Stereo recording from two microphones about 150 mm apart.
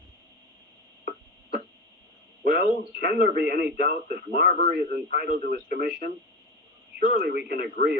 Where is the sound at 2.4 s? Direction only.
45° left (ahead or behind).